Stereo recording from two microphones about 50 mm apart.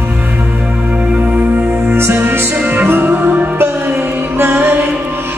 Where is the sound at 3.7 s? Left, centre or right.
Right.